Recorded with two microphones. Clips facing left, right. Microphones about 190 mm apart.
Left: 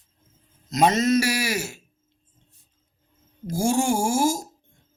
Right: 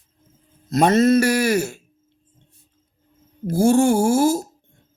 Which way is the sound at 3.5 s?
55° right (ahead or behind).